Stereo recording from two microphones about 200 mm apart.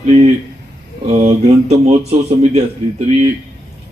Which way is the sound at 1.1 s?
35° right (ahead or behind).